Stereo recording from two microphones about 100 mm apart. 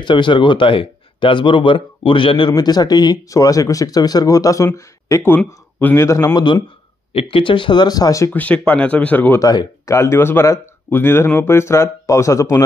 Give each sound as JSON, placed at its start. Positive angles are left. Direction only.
{"t": 0.0, "sound": "speech", "side_deg": 50}
{"t": 6.0, "sound": "speech", "side_deg": 30}
{"t": 6.3, "sound": "speech", "side_deg": 50}
{"t": 7.1, "sound": "speech", "side_deg": 70}
{"t": 8.3, "sound": "speech", "side_deg": 15}
{"t": 9.4, "sound": "speech", "side_deg": 40}